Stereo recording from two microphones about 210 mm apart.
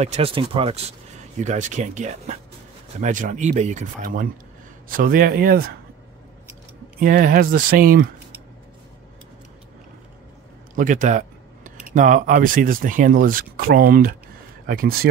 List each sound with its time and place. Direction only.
0.0 s speech: 30° right (ahead or behind)
7.0 s speech: 40° right (ahead or behind)
10.8 s speech: 40° right (ahead or behind)